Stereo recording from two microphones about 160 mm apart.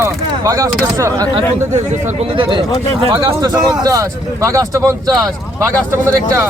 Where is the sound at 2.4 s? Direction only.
30° right (ahead or behind).